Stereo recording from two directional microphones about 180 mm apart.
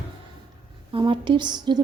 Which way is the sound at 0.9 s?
30° right (ahead or behind).